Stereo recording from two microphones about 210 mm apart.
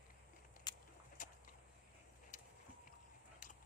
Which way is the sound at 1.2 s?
40° left (ahead or behind).